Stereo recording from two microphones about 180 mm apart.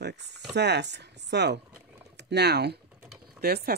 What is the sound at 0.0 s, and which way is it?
Speech, 70° right (ahead or behind).